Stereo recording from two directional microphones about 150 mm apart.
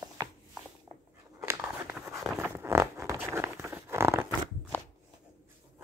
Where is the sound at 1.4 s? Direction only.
15° right (ahead or behind).